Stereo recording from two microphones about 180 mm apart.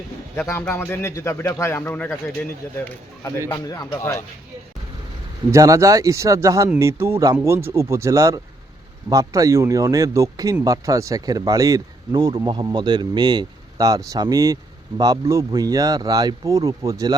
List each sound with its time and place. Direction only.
0.3 s a man's voice: 15° left (ahead or behind)
3.5 s speech: 20° left (ahead or behind)
5.5 s speech: 15° right (ahead or behind)